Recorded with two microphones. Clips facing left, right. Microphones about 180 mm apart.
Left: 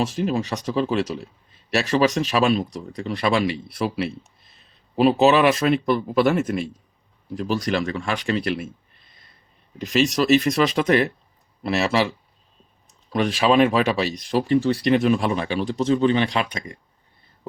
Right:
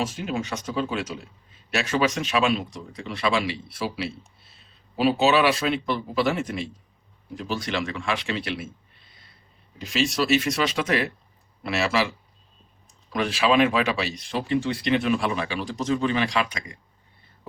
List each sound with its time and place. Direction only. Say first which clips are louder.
0.0 s speech: left 5 dB; 35° left (ahead or behind)
4.9 s speech: left 4 dB; 45° left (ahead or behind)
9.8 s speech: left 5 dB; 45° left (ahead or behind)
13.1 s speech: left 3 dB; 35° left (ahead or behind)